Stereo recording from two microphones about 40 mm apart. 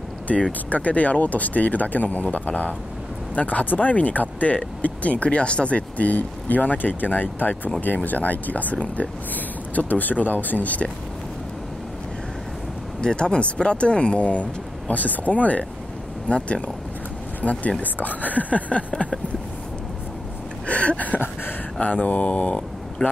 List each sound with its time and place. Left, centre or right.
0.3 s speech: left
9.3 s speech: left
13.0 s speech: left
16.3 s speech: left
17.4 s speech: left
20.6 s a sound: left
21.8 s speech: left